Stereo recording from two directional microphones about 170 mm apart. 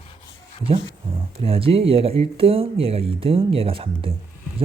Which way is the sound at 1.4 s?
35° right (ahead or behind).